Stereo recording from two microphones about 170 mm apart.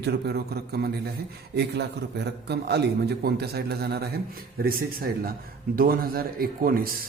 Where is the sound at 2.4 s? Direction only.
75° right (ahead or behind); by 6.9 s 60° right (ahead or behind).